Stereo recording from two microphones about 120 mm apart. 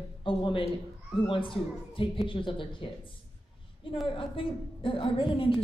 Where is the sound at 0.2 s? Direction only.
45° left (ahead or behind).